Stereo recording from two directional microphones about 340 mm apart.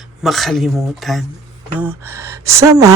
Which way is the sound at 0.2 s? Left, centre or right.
Centre.